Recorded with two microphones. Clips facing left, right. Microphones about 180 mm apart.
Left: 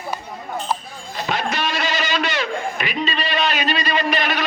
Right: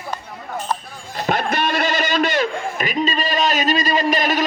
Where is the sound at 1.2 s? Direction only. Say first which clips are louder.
Right 3 dB; 55° right (ahead or behind).